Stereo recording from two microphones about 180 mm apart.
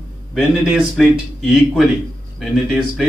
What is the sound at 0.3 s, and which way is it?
A man's voice, centre (ahead or behind).